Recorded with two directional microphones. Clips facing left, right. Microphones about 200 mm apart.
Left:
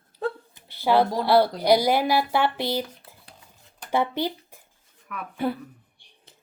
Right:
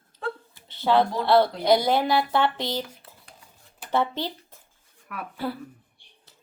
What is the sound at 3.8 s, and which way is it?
Speech, 10° left (ahead or behind).